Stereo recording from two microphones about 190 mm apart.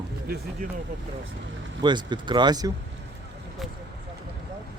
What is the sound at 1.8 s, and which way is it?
Speech, 25° right (ahead or behind).